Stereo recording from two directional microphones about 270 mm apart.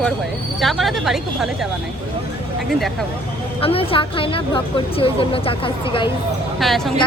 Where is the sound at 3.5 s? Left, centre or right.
Left.